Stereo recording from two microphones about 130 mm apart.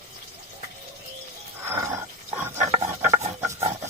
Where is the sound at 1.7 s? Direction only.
20° right (ahead or behind).